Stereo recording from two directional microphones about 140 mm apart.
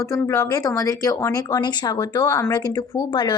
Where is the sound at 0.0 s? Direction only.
20° left (ahead or behind).